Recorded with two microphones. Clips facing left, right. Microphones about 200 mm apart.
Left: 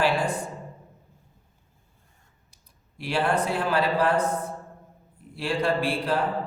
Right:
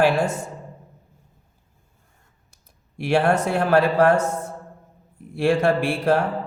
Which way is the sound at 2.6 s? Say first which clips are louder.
Right 10 dB; 50° right (ahead or behind).